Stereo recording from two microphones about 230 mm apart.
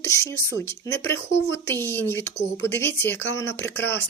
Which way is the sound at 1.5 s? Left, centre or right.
Centre.